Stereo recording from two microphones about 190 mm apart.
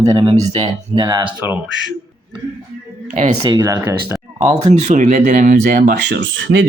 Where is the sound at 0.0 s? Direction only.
25° right (ahead or behind).